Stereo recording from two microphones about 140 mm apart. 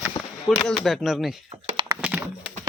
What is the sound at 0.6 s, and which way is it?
Speech, centre (ahead or behind).